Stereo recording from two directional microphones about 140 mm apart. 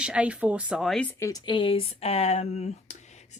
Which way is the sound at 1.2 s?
30° left (ahead or behind).